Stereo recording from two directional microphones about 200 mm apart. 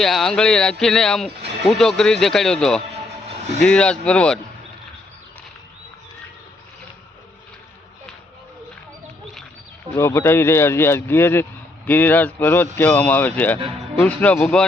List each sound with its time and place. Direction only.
0.0 s speech: centre (ahead or behind)
3.2 s vehicle: 35° right (ahead or behind)
3.6 s speech: 5° left (ahead or behind)
9.9 s speech: 15° left (ahead or behind)